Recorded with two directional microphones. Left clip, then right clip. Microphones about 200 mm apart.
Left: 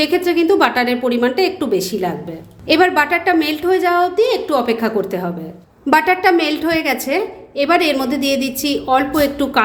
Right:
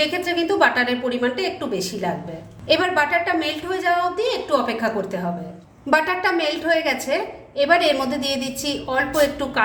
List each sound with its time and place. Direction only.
0.1 s a woman's voice: 40° left (ahead or behind)